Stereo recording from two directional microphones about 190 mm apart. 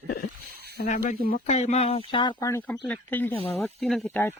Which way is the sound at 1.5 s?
35° left (ahead or behind).